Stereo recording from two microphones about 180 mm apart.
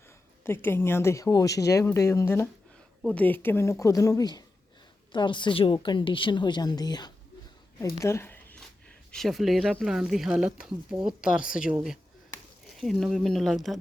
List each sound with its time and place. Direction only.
0.4 s a woman's voice: 15° left (ahead or behind)
8.0 s a sound: 15° left (ahead or behind)
9.1 s speech: centre (ahead or behind)